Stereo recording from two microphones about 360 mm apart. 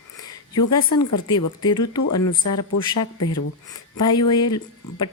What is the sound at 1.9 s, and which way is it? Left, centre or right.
Speech, left.